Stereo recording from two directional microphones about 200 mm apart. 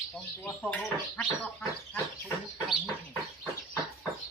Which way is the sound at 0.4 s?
5° left (ahead or behind).